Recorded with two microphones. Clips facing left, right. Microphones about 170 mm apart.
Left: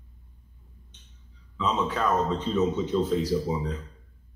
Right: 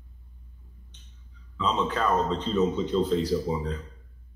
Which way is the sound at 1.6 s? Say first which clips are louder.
Even; 5° left (ahead or behind).